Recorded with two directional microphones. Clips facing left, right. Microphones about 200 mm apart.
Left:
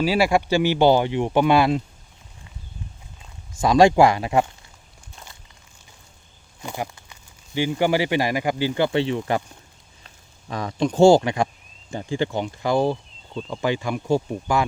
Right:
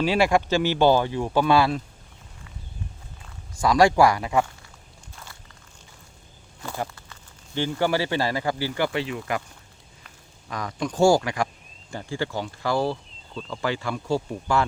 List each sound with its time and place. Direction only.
0.0 s speech: 5° left (ahead or behind)
3.6 s speech: 25° left (ahead or behind)
5.1 s walk: 20° left (ahead or behind)
6.6 s speech: 15° left (ahead or behind)
10.5 s speech: 25° left (ahead or behind)